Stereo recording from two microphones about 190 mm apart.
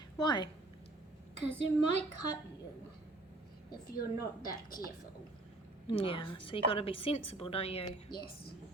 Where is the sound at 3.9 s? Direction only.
50° left (ahead or behind).